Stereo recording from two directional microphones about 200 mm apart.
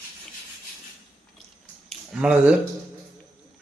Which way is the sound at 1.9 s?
5° right (ahead or behind).